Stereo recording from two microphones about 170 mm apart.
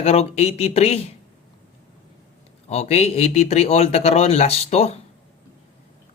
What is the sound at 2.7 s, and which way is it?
Speech, 35° left (ahead or behind).